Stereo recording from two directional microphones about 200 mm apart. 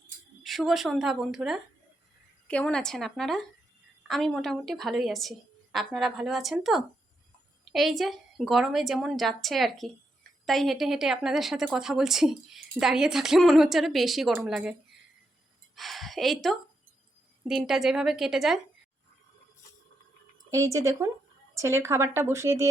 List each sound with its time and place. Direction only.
0.4 s a woman's voice: centre (ahead or behind)
20.5 s a woman's voice: 15° right (ahead or behind)